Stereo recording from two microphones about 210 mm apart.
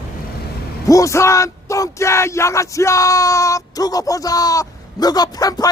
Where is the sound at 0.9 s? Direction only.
15° left (ahead or behind).